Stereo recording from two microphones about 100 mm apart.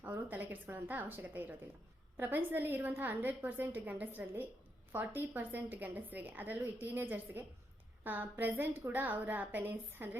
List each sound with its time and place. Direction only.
0.0 s a woman's voice: 20° right (ahead or behind)